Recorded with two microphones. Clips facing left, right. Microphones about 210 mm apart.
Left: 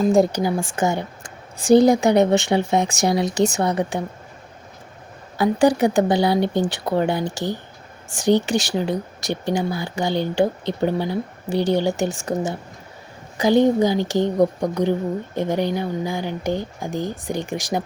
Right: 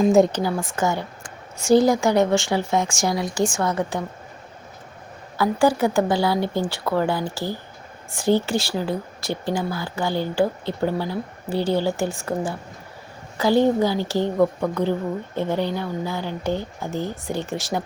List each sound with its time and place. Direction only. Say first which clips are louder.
0.0 s speech: right 1 dB; centre (ahead or behind)
0.3 s speech: left 2 dB; 15° left (ahead or behind)
5.4 s speech: left 2 dB; 20° left (ahead or behind)